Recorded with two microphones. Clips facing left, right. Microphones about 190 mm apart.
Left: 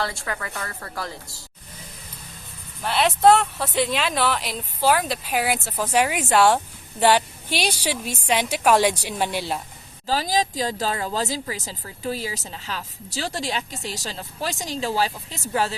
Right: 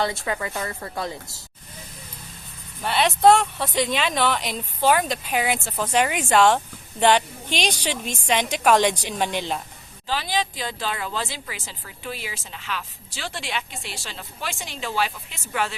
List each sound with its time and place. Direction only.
0.0 s a woman's voice: 20° right (ahead or behind)
2.8 s a woman's voice: centre (ahead or behind)
10.1 s a woman's voice: 40° left (ahead or behind)